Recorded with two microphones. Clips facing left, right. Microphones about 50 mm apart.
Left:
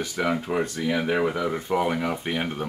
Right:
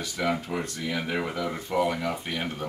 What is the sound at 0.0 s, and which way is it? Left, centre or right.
Speech, centre.